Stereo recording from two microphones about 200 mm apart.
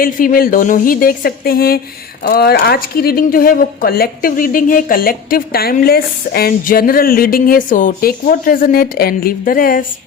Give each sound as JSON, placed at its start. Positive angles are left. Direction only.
{"t": 0.0, "sound": "speech", "side_deg": 45}